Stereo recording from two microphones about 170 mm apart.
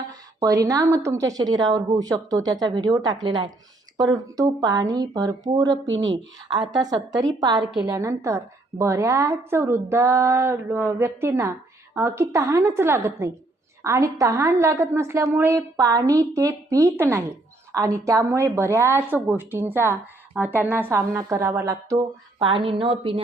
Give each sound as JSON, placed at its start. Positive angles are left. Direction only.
{"t": 0.1, "sound": "a woman's voice", "side_deg": -20}
{"t": 22.4, "sound": "a woman's voice", "side_deg": -30}